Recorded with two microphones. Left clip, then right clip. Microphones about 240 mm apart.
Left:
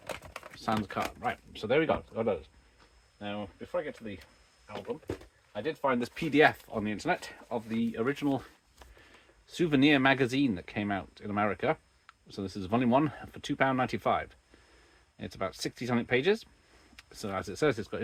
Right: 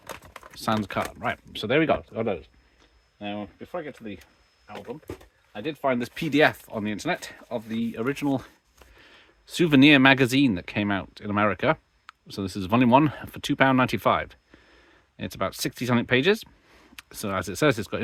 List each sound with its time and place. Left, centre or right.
0.0 s a sound: centre
0.5 s speech: right
5.6 s speech: right
9.5 s speech: right